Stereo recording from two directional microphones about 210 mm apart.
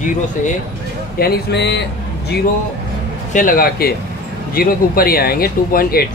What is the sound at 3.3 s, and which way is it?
Speech, 40° left (ahead or behind).